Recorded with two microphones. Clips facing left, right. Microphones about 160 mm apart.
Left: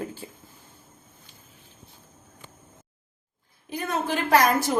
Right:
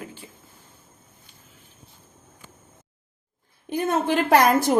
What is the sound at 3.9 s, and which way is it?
Speech, 55° right (ahead or behind).